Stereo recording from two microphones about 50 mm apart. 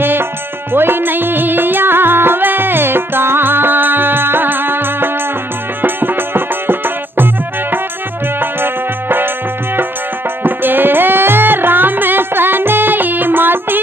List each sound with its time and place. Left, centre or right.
0.0 s music: right
8.4 s music: right
10.4 s music: right